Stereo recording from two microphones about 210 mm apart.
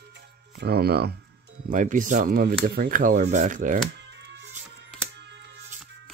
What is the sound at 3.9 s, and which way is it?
Music, 55° right (ahead or behind).